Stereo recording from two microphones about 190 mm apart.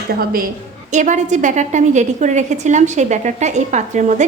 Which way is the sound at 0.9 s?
40° right (ahead or behind).